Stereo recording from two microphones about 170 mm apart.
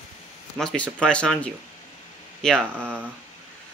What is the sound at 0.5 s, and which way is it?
Speech, 5° left (ahead or behind).